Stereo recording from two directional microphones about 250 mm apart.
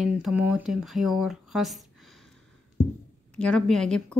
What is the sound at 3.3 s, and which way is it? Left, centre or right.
Speech, centre.